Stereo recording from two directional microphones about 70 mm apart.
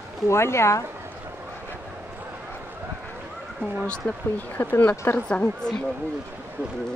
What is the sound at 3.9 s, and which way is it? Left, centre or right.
Speech, left.